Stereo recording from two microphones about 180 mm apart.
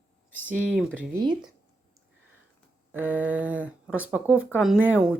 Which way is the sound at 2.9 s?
10° right (ahead or behind).